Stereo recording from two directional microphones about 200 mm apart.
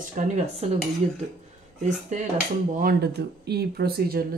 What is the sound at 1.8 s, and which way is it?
Speech, 40° right (ahead or behind).